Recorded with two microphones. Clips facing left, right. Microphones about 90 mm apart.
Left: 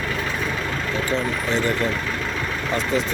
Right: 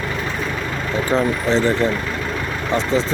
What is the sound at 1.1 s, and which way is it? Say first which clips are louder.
Speech: right 7 dB; 30° right (ahead or behind).